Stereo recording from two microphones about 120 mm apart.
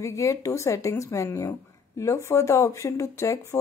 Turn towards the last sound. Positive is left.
turn(degrees=25)  # may be behind; listen again after turning